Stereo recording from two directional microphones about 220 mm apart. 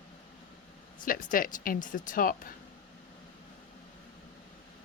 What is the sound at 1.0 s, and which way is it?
Speech, 40° left (ahead or behind).